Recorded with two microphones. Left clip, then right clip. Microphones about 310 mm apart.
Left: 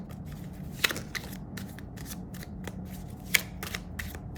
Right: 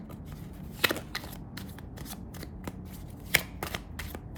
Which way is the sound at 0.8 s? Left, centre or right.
Centre.